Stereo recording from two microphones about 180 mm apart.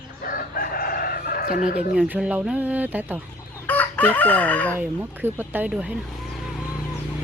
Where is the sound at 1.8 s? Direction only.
10° right (ahead or behind).